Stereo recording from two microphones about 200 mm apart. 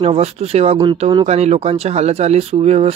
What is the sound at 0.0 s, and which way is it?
Speech, 30° right (ahead or behind).